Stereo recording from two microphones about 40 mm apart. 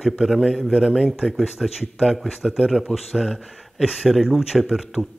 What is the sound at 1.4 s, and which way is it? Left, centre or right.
Speech, centre.